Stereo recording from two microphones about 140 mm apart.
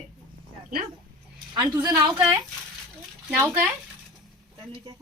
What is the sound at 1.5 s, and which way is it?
Speech, 30° right (ahead or behind).